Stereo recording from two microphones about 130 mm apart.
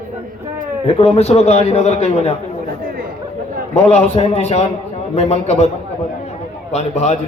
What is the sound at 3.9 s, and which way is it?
A man's voice, 55° left (ahead or behind).